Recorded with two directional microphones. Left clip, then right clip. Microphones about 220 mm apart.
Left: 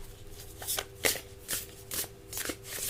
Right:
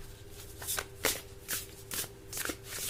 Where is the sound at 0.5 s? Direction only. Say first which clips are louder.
Left 2 dB; centre (ahead or behind).